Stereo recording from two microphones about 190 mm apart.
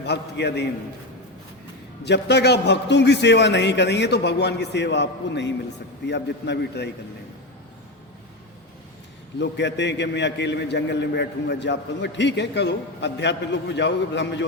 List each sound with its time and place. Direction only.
0.0 s a man's voice: 60° left (ahead or behind)
2.0 s a man's voice: 65° left (ahead or behind)
9.4 s a man's voice: 65° left (ahead or behind)